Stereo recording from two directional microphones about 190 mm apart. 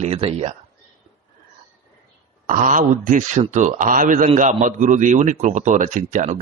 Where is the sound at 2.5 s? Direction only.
45° right (ahead or behind).